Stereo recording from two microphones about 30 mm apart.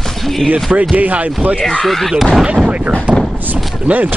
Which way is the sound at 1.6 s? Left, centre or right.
Left.